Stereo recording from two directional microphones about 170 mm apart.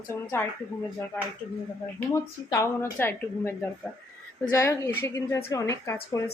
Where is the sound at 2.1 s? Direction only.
20° left (ahead or behind).